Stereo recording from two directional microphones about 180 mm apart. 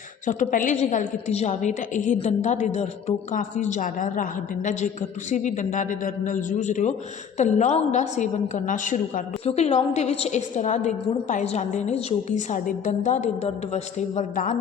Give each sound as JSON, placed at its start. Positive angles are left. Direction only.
{"t": 0.3, "sound": "a woman's voice", "side_deg": 45}